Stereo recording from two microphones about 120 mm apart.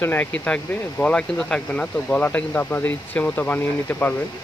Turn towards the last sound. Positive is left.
turn(degrees=15)  # may be behind; listen again after turning